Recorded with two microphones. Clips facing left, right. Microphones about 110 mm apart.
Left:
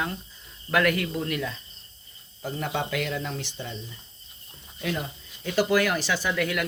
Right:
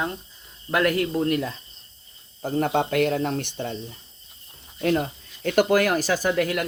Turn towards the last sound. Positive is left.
turn(degrees=-40)  # may be behind; listen again after turning